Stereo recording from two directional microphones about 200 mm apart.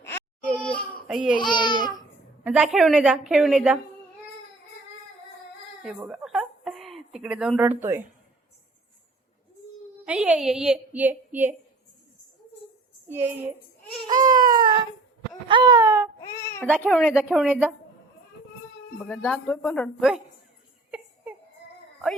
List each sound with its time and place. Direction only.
0.0 s baby cry: 10° left (ahead or behind)
1.4 s speech: 20° left (ahead or behind)
2.4 s a woman's voice: 5° right (ahead or behind)
5.8 s a sound: 5° right (ahead or behind)
10.1 s a woman's voice: 5° right (ahead or behind)
13.1 s a woman's voice: 10° right (ahead or behind)
14.3 s baby cry: 20° right (ahead or behind)
15.4 s wail: 25° right (ahead or behind)
16.2 s a sound: 15° left (ahead or behind)
16.8 s a woman's voice: centre (ahead or behind)
18.9 s a woman's voice: centre (ahead or behind)